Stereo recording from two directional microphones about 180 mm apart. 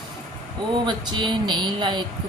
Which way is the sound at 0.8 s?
25° right (ahead or behind).